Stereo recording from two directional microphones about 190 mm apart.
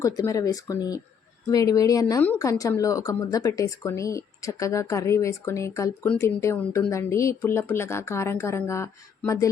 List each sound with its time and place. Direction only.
0.0 s speech: 15° left (ahead or behind)